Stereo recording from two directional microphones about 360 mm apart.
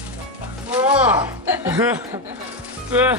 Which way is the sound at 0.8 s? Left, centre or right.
Centre.